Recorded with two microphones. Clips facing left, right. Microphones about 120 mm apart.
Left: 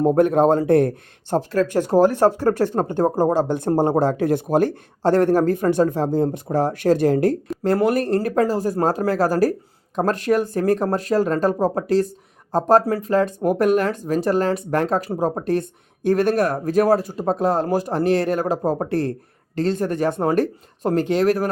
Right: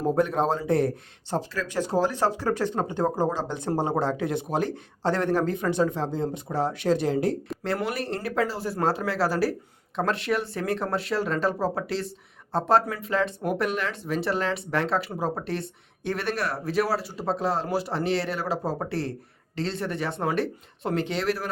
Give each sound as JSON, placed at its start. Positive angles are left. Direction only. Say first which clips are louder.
{"t": 0.0, "sound": "speech", "louder": "left 8 dB", "side_deg": 55}